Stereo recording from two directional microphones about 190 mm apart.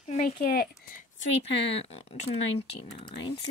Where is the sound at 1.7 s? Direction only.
30° left (ahead or behind).